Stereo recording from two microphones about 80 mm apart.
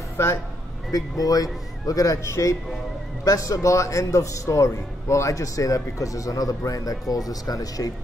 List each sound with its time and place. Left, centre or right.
0.2 s speech: left
0.9 s a man's voice: left